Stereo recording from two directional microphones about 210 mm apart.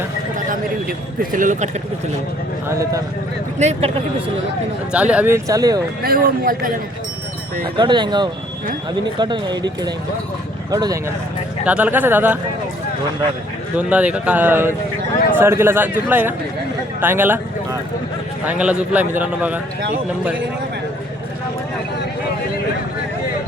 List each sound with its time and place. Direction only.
0.3 s speech: 40° right (ahead or behind)
2.6 s a man's voice: 15° right (ahead or behind)
3.6 s speech: 30° right (ahead or behind)
4.9 s a man's voice: 5° right (ahead or behind)
6.0 s a man's voice: 45° right (ahead or behind)
7.8 s speech: 20° right (ahead or behind)
10.7 s a man's voice: 15° right (ahead or behind)
11.6 s a man's voice: 5° right (ahead or behind)
13.7 s a man's voice: 5° right (ahead or behind)